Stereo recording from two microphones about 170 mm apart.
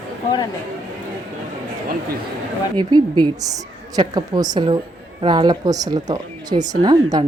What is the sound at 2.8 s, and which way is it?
A woman's voice, 25° right (ahead or behind).